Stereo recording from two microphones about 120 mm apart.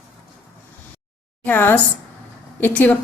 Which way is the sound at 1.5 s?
15° left (ahead or behind).